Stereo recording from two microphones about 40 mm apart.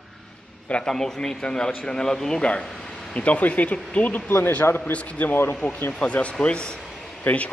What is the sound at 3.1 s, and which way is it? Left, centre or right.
A man's voice, left.